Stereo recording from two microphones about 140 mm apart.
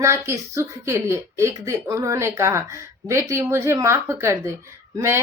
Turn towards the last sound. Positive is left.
turn(degrees=-20)  # may be behind; listen again after turning